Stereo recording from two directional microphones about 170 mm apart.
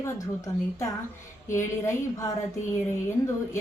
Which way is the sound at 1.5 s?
15° left (ahead or behind).